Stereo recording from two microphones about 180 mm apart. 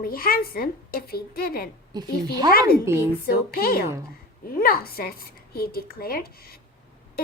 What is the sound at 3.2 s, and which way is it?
Speech, 55° left (ahead or behind).